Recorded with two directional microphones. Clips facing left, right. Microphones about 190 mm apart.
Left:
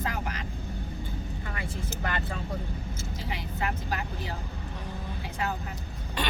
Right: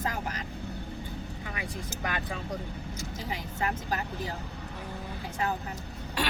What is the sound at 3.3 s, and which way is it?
Speech, 45° right (ahead or behind).